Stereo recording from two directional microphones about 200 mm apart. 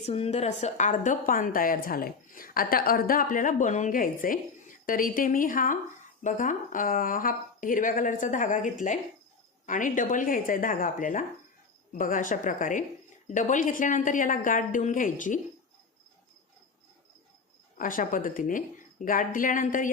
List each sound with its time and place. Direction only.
0.0 s a woman's voice: 30° left (ahead or behind)
17.7 s a woman's voice: 45° left (ahead or behind)